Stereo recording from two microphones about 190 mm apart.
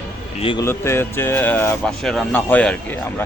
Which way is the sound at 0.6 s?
15° left (ahead or behind).